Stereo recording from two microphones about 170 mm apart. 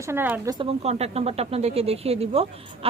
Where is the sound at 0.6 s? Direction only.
35° right (ahead or behind).